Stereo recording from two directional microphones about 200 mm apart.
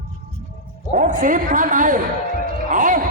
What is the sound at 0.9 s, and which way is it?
A man's voice, 40° right (ahead or behind).